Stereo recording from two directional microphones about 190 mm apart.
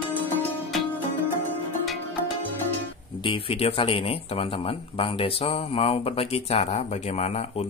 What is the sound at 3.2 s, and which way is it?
Speech, 30° left (ahead or behind).